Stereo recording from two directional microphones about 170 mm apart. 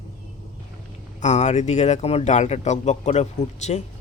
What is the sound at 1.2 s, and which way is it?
Speech, 45° left (ahead or behind).